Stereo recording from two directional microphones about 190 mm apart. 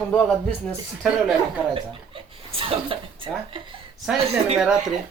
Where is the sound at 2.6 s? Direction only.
30° right (ahead or behind).